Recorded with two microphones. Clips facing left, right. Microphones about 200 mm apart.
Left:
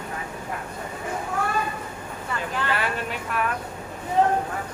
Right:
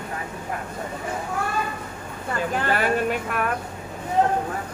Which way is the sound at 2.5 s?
45° right (ahead or behind).